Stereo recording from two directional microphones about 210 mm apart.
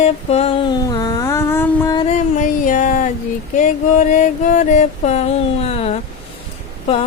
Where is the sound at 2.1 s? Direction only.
35° left (ahead or behind).